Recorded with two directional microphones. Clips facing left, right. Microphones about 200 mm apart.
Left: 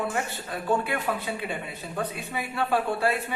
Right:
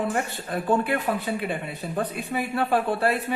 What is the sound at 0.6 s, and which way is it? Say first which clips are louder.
Speech: right 3 dB; 50° right (ahead or behind).